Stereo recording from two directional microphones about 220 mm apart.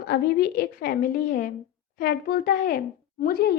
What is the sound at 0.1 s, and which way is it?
A woman's voice, 45° left (ahead or behind).